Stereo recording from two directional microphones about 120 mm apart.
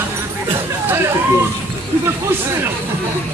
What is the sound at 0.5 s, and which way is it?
Music, 20° right (ahead or behind).